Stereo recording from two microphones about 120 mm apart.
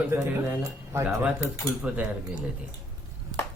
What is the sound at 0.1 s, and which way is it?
Speech, 25° right (ahead or behind).